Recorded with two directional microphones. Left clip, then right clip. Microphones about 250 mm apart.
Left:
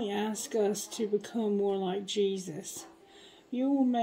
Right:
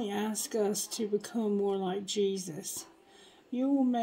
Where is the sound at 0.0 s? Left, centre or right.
Right.